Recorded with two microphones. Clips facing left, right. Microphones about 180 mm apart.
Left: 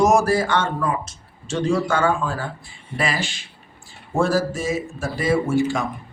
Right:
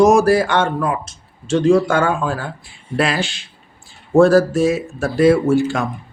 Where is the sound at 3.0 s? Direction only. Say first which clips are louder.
Right 5 dB; 70° right (ahead or behind).